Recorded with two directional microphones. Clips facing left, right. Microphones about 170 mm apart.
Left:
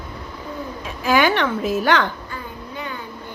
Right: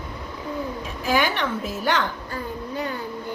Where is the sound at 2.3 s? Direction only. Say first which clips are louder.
Right 3 dB; 40° right (ahead or behind).